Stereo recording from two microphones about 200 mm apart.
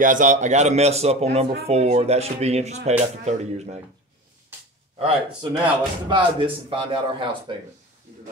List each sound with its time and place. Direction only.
0.0 s speech: 40° right (ahead or behind)
4.9 s speech: 30° right (ahead or behind)